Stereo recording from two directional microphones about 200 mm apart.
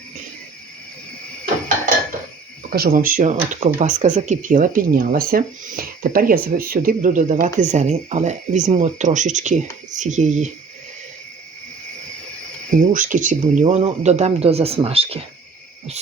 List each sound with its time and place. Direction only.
2.6 s speech: 45° right (ahead or behind)
12.7 s speech: 40° right (ahead or behind)